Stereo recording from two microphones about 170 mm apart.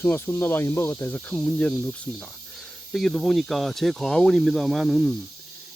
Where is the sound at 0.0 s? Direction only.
15° left (ahead or behind).